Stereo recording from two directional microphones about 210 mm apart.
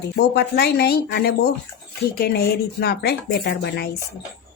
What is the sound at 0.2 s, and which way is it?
Speech, 50° left (ahead or behind).